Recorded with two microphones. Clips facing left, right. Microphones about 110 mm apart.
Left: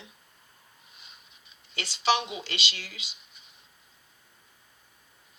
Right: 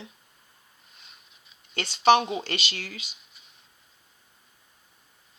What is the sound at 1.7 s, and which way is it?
Speech, 50° right (ahead or behind).